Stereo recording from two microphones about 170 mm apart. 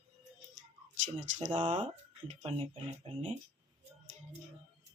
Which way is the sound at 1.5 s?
30° right (ahead or behind).